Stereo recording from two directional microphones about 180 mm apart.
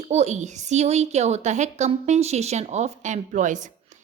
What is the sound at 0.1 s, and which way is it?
A woman's voice, 40° right (ahead or behind).